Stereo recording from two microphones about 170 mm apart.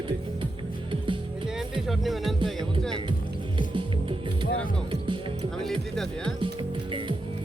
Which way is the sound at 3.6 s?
30° right (ahead or behind).